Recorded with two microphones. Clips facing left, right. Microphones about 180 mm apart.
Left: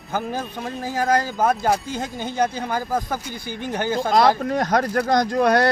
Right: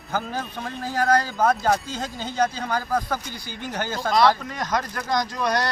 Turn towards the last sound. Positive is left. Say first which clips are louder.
# left 7 dB
turn(degrees=55)  # may be behind; listen again after turning